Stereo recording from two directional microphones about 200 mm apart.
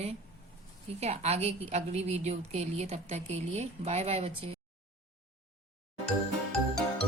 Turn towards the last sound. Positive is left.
turn(degrees=5)  # may be behind; listen again after turning